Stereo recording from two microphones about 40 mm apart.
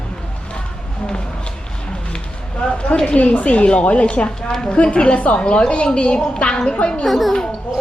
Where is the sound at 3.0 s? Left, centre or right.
Left.